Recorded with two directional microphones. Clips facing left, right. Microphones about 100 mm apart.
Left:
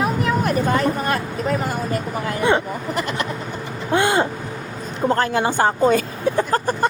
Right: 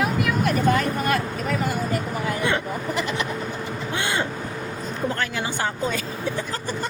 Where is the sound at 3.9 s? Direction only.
40° left (ahead or behind).